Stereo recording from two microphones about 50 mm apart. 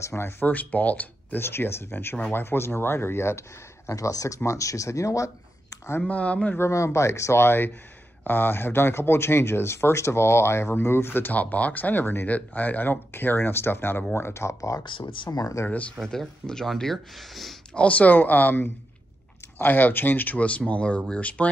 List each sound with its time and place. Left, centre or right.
0.0 s speech: left
0.4 s speech: left
1.4 s speech: left
4.5 s speech: left
6.0 s speech: left
6.6 s speech: left
7.4 s speech: left
11.3 s speech: left
12.3 s speech: left
14.1 s speech: left
15.3 s speech: left
16.1 s speech: centre
17.7 s speech: left
20.3 s speech: left